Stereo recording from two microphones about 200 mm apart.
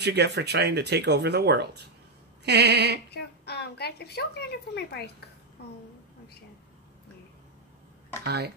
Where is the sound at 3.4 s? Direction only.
55° left (ahead or behind).